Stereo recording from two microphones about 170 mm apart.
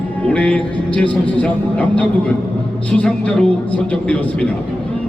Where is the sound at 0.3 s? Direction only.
10° left (ahead or behind).